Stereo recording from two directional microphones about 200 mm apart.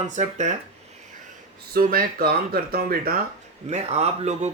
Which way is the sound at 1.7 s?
45° right (ahead or behind).